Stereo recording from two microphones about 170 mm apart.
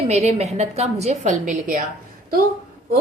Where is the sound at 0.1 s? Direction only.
40° right (ahead or behind).